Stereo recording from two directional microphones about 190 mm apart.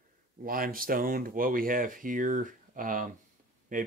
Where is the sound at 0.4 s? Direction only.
50° right (ahead or behind).